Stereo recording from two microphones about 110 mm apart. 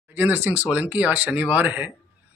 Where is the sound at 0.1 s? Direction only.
15° right (ahead or behind).